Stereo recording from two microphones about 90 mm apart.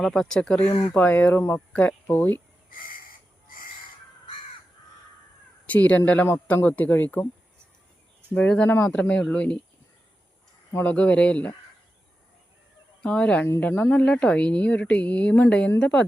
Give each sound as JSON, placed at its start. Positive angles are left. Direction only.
{"t": 0.0, "sound": "a man's voice", "side_deg": 5}
{"t": 5.6, "sound": "a man's voice", "side_deg": 15}
{"t": 8.3, "sound": "speech", "side_deg": 15}
{"t": 10.8, "sound": "speech", "side_deg": 15}
{"t": 13.0, "sound": "speech", "side_deg": 15}